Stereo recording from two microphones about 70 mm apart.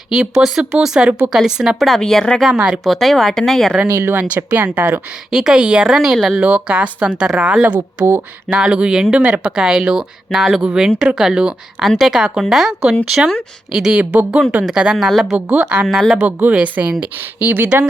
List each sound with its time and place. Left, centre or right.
0.1 s a woman's voice: centre
2.0 s speech: centre
2.5 s a woman's voice: centre
2.8 s speech: centre
3.9 s speech: right
4.5 s speech: right
5.3 s a woman's voice: centre
15.4 s speech: right